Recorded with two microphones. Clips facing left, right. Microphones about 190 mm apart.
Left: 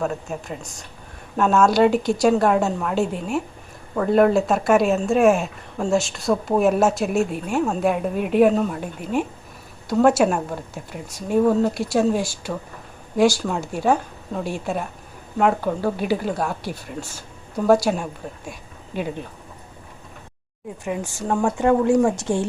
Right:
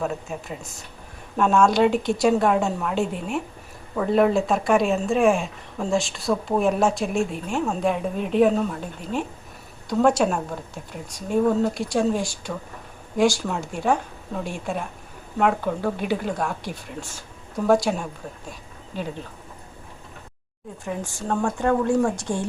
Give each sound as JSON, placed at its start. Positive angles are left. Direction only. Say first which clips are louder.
{"t": 0.0, "sound": "a woman's voice", "louder": "left 2 dB", "side_deg": 0}
{"t": 20.8, "sound": "speech", "louder": "left 3 dB", "side_deg": 20}